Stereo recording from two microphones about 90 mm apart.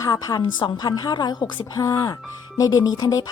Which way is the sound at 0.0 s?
45° left (ahead or behind).